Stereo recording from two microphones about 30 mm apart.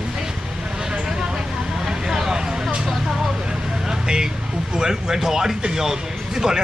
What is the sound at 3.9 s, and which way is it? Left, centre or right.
Vehicle, right.